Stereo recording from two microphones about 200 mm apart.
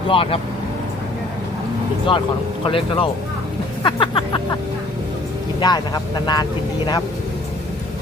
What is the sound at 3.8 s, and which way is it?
Music, 25° left (ahead or behind).